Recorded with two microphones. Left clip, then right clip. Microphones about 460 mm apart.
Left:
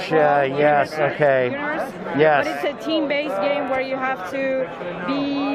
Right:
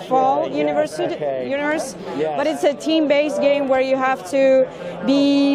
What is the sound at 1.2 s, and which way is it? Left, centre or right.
Speech, left.